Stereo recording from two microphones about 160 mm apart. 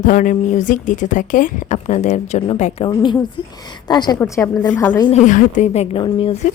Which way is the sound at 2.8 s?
30° left (ahead or behind).